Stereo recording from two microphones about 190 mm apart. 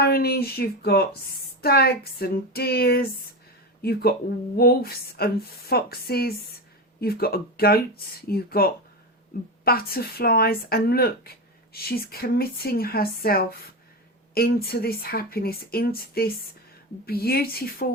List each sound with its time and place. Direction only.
0.0 s speech: 55° left (ahead or behind)